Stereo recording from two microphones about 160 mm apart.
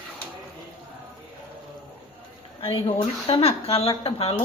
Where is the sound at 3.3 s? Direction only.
35° left (ahead or behind).